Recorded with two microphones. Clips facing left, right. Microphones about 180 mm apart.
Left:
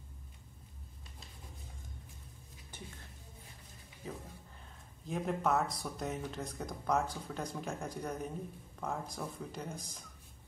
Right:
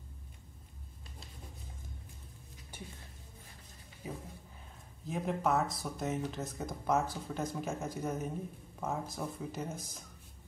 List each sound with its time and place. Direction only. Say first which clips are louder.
4.0 s speech: right 1 dB; 10° right (ahead or behind)